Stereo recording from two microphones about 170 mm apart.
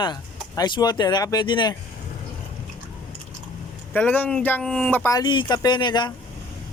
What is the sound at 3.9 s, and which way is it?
Speech, 10° left (ahead or behind).